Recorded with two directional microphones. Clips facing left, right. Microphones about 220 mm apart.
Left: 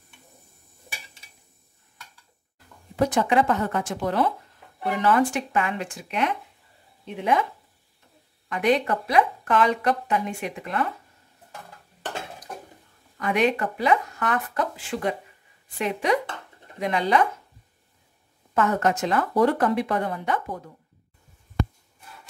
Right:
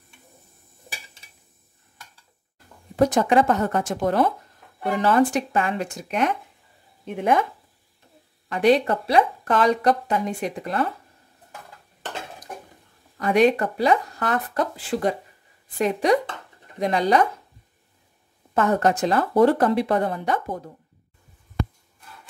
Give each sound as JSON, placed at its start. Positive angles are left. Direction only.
{"t": 3.0, "sound": "speech", "side_deg": -40}
{"t": 8.5, "sound": "speech", "side_deg": -35}
{"t": 13.2, "sound": "speech", "side_deg": -35}
{"t": 18.5, "sound": "speech", "side_deg": -35}